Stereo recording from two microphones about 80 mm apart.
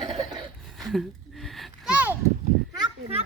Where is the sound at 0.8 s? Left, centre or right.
Centre.